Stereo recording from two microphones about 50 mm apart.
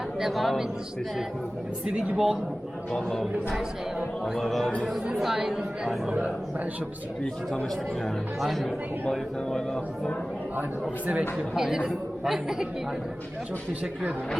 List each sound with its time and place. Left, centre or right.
0.2 s music: centre
1.9 s a man's voice: right
2.1 s speech: centre
2.9 s music: centre
4.8 s speech: centre
6.1 s a man's voice: right
8.4 s music: centre
10.6 s speech: right
11.3 s speech: centre